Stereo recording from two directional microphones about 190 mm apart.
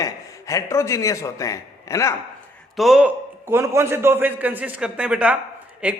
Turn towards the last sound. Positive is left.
turn(degrees=-5)  # may be behind; listen again after turning